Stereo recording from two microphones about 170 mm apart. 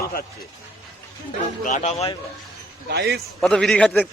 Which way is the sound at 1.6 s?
45° left (ahead or behind).